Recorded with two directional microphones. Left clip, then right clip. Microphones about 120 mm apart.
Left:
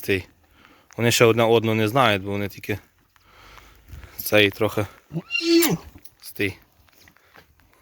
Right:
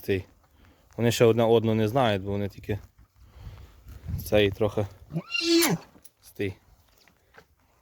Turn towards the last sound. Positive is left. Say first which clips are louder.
# left 6 dB
turn(degrees=-10)  # may be behind; listen again after turning